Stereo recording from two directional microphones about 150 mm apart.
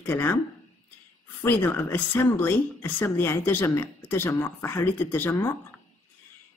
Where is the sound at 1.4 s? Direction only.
15° left (ahead or behind).